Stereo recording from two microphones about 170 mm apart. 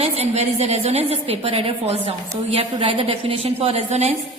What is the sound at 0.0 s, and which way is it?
A woman's voice, 40° right (ahead or behind).